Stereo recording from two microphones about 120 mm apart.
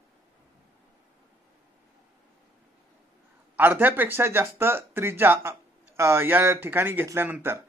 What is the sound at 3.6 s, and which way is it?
Speech, 15° right (ahead or behind).